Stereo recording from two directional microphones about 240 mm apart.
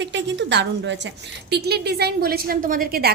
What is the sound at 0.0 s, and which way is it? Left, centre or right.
A woman's voice, right.